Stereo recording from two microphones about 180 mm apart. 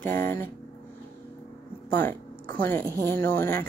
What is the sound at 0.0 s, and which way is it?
Speech, 10° left (ahead or behind).